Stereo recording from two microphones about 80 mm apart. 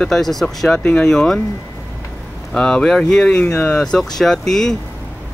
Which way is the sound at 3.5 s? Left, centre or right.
Left.